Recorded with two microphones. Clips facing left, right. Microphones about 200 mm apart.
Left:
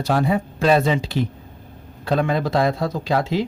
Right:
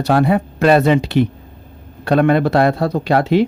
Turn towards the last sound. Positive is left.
turn(degrees=-65)  # may be behind; listen again after turning